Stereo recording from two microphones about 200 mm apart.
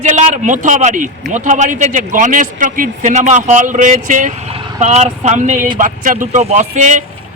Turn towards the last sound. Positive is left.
turn(degrees=-35)  # may be behind; listen again after turning